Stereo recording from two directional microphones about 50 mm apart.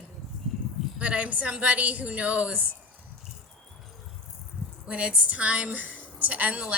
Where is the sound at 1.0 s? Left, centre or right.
Right.